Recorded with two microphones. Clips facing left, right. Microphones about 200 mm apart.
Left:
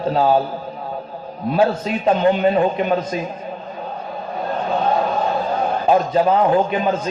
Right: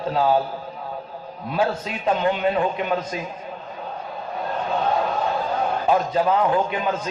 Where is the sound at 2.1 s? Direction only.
30° left (ahead or behind).